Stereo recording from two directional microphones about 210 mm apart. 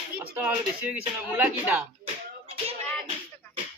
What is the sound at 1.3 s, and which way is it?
Speech, 10° right (ahead or behind).